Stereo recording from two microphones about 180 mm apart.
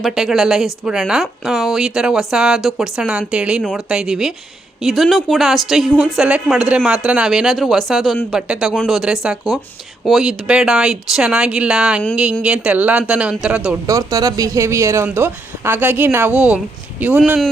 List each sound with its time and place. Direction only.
0.0 s a woman's voice: centre (ahead or behind)
13.8 s speech: 20° right (ahead or behind)